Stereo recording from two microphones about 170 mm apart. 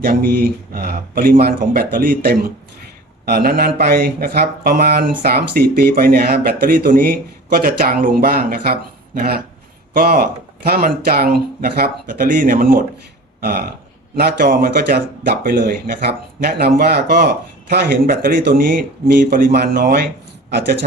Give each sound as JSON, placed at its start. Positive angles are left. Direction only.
{"t": 0.0, "sound": "speech", "side_deg": -60}